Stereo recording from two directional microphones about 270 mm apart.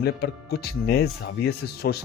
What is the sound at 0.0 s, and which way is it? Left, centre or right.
Speech, left.